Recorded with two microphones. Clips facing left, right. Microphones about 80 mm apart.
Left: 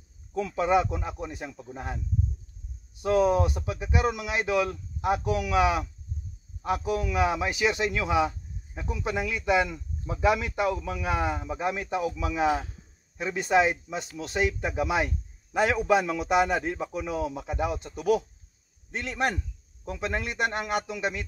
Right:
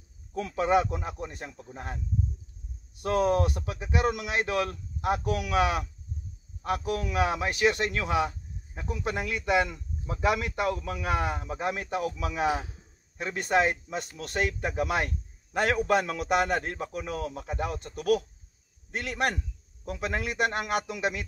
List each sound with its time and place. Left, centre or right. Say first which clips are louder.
0.3 s speech: left 1 dB; centre
3.0 s speech: left 2 dB; centre